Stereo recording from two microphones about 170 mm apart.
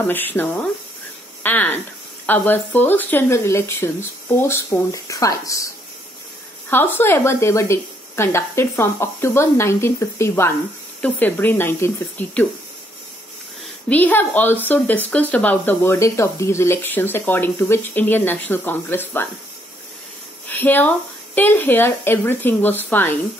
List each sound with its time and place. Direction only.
0.0 s speech: 10° left (ahead or behind)
6.7 s speech: 10° left (ahead or behind)
13.8 s speech: 10° left (ahead or behind)
20.4 s speech: 10° left (ahead or behind)